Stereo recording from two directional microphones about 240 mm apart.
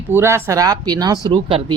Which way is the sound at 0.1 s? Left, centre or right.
Centre.